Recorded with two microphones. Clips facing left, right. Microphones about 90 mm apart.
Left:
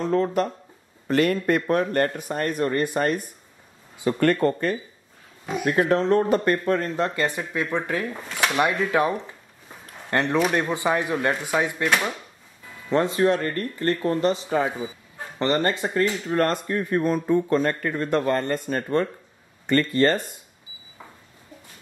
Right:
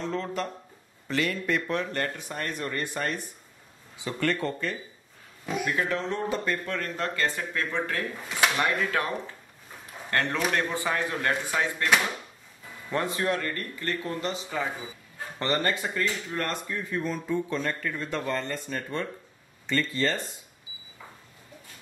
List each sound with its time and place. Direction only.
0.0 s a man's voice: 45° left (ahead or behind)
5.7 s a man's voice: 40° left (ahead or behind)
6.6 s speech: 35° left (ahead or behind)
7.0 s speech: 20° left (ahead or behind)
10.1 s speech: 20° left (ahead or behind)
12.9 s speech: 25° left (ahead or behind)
15.3 s speech: 20° left (ahead or behind); by 16.5 s 45° left (ahead or behind)
16.6 s a man's voice: 55° left (ahead or behind)